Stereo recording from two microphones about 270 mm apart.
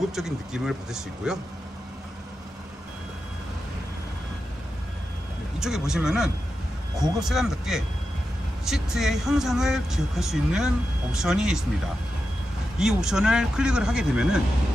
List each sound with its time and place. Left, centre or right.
0.2 s speech: centre
5.5 s speech: centre
12.8 s speech: centre